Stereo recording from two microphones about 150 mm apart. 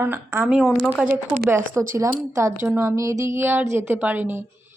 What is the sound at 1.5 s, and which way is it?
A woman's voice, 20° right (ahead or behind).